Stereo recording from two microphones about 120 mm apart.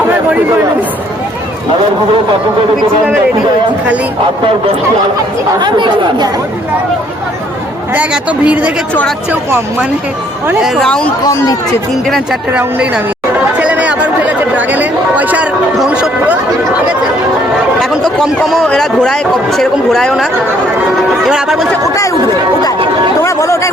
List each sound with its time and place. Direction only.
5.5 s speech: 40° right (ahead or behind)
7.9 s speech: 10° right (ahead or behind)
10.6 s speech: centre (ahead or behind)
12.5 s speech: 10° right (ahead or behind)
13.6 s chatter: 10° right (ahead or behind)
18.4 s speech: 5° left (ahead or behind)
23.2 s chatter: 25° left (ahead or behind)